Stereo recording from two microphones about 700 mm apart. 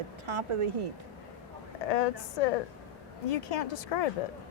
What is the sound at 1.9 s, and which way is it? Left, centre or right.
A woman's voice, left.